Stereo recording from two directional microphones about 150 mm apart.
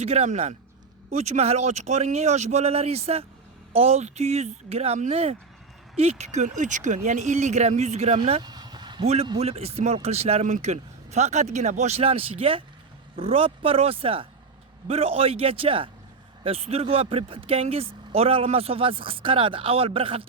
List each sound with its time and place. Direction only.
0.0 s a man's voice: 45° right (ahead or behind)
8.4 s vehicle: 30° right (ahead or behind)
9.4 s a man's voice: 45° right (ahead or behind)